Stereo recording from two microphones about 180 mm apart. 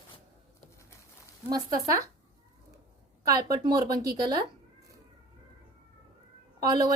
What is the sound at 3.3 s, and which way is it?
A woman's voice, 20° right (ahead or behind).